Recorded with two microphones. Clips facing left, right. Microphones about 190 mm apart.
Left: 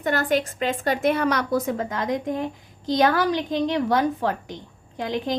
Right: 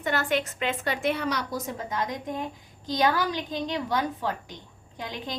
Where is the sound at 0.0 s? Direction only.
40° left (ahead or behind).